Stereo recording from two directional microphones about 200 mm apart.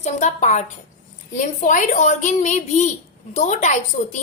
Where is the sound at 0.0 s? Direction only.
35° left (ahead or behind).